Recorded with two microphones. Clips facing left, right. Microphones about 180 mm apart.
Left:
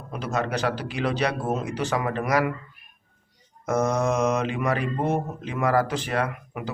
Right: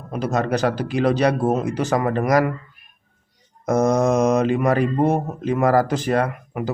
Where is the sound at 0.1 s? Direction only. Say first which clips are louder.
Right 6 dB; 40° right (ahead or behind).